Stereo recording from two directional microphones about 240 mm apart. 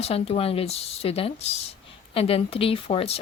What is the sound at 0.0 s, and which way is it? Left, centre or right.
Speech, left.